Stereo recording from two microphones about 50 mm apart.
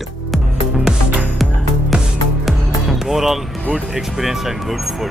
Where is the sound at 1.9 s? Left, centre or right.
Right.